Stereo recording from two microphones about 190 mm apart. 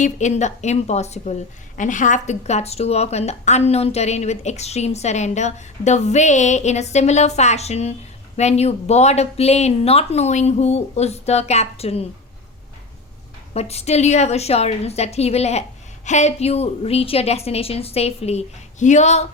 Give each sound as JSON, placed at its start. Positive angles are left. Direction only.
{"t": 0.0, "sound": "a woman's voice", "side_deg": 40}
{"t": 13.5, "sound": "a woman's voice", "side_deg": 35}